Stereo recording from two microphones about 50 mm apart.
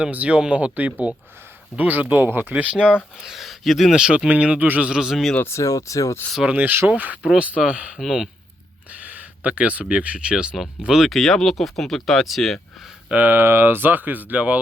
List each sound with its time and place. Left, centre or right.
0.0 s speech: right
2.6 s speech: right
3.2 s speech: centre
3.9 s speech: centre
4.6 s speech: right
4.9 s speech: centre
5.5 s speech: left
6.5 s speech: right; by 11.1 s centre
11.1 s speech: centre
13.1 s speech: right
13.4 s speech: right